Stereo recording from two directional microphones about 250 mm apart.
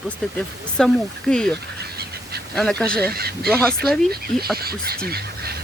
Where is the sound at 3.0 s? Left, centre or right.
Right.